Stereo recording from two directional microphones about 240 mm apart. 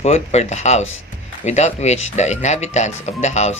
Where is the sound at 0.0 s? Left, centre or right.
Left.